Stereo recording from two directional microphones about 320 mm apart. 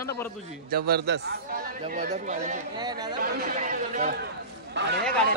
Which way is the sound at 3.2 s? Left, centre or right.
Right.